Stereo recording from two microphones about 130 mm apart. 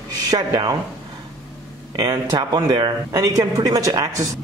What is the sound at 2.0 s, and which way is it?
Speech, 35° right (ahead or behind).